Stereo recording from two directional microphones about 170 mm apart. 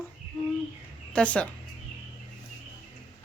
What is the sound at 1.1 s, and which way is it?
Speech, 5° left (ahead or behind).